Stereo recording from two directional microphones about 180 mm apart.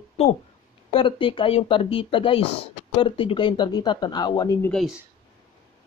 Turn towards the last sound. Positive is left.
turn(degrees=20)  # may be behind; listen again after turning